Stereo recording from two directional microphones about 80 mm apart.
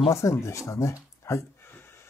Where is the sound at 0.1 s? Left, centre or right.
Left.